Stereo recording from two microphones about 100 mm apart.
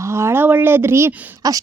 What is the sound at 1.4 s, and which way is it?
Speech, 35° right (ahead or behind).